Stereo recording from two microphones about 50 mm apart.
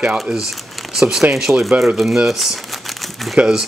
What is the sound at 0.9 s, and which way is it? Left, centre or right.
Speech, centre.